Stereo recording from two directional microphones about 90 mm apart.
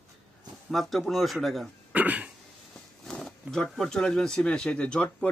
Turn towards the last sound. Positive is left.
turn(degrees=15)  # may be behind; listen again after turning